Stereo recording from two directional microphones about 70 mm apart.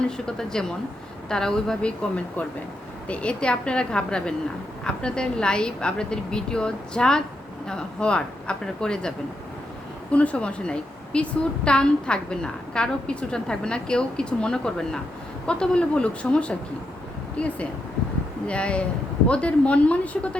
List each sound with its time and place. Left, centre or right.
0.3 s a woman's voice: centre
3.1 s a woman's voice: centre